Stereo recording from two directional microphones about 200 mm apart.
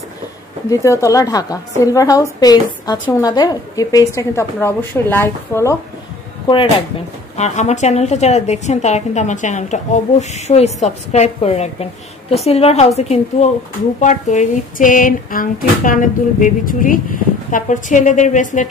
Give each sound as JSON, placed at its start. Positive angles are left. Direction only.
{"t": 0.7, "sound": "a woman's voice", "side_deg": 15}
{"t": 7.3, "sound": "a woman's voice", "side_deg": 35}